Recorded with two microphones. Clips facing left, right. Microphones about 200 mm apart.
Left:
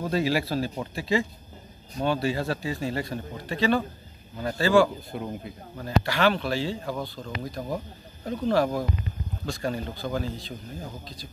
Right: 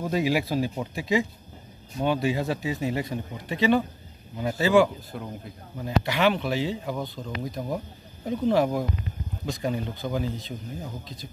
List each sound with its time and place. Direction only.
0.0 s a man's voice: 15° right (ahead or behind)
4.8 s speech: centre (ahead or behind)
5.8 s speech: 20° right (ahead or behind)
8.3 s a man's voice: 15° right (ahead or behind)